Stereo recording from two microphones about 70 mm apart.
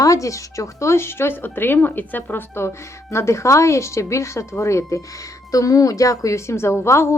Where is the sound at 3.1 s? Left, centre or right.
Left.